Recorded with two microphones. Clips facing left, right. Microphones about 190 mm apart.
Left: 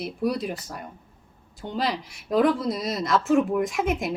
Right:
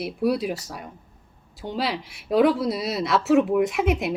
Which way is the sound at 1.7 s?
5° right (ahead or behind).